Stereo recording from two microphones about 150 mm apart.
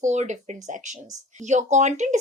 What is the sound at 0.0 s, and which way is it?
Speech, 50° right (ahead or behind).